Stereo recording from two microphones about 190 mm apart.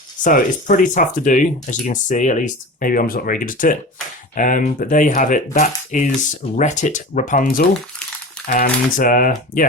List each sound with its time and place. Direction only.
0.3 s speech: 45° left (ahead or behind)